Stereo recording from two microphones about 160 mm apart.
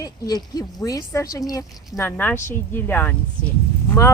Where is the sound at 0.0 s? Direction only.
25° left (ahead or behind).